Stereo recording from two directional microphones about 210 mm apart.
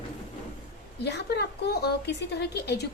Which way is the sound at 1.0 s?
55° left (ahead or behind).